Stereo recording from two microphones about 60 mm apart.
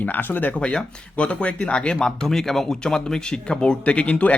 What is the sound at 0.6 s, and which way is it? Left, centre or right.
Speech, centre.